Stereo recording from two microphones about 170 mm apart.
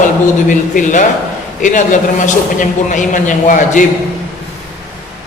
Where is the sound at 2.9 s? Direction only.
50° left (ahead or behind).